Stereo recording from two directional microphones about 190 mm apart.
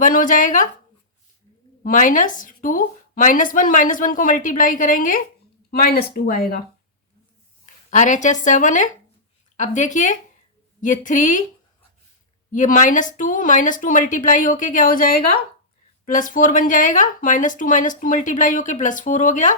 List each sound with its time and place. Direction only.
0.0 s speech: 45° left (ahead or behind)
1.8 s speech: 45° left (ahead or behind)
7.6 s speech: 40° left (ahead or behind)
12.5 s speech: 45° left (ahead or behind)